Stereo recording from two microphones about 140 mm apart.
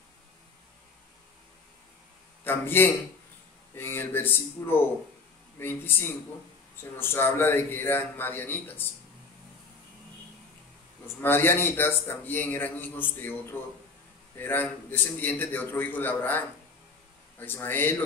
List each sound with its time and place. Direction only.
2.4 s a man's voice: 15° left (ahead or behind)
11.1 s a man's voice: 15° left (ahead or behind)